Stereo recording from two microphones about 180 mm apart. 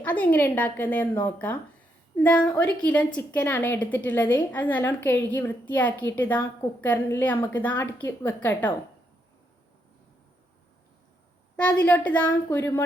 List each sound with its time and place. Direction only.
0.0 s a woman's voice: 10° left (ahead or behind)
11.5 s a woman's voice: 5° left (ahead or behind)